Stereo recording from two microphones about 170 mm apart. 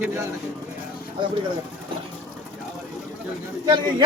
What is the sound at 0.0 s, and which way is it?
Speech, 15° right (ahead or behind).